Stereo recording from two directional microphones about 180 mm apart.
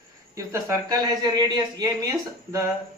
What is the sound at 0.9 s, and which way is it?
Speech, 20° right (ahead or behind).